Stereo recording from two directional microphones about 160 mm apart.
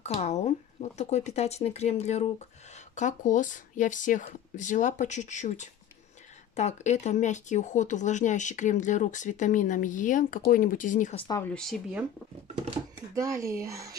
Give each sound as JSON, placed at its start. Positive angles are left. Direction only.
{"t": 0.0, "sound": "speech", "side_deg": 40}
{"t": 11.1, "sound": "speech", "side_deg": 25}
{"t": 11.4, "sound": "speech", "side_deg": 5}
{"t": 13.1, "sound": "speech", "side_deg": -20}